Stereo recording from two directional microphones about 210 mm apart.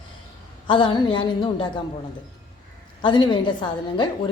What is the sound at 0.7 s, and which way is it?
A woman's voice, 20° left (ahead or behind).